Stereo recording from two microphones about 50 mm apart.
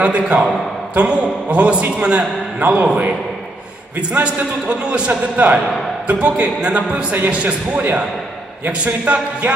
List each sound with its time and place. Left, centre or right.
0.0 s a man's voice: right